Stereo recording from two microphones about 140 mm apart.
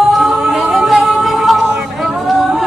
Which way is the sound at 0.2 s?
Centre (ahead or behind).